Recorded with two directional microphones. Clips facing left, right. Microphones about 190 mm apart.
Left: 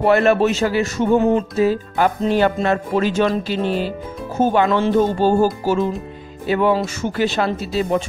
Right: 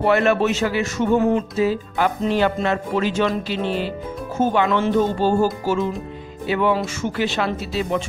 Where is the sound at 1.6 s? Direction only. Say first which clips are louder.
Left 3 dB; 45° left (ahead or behind).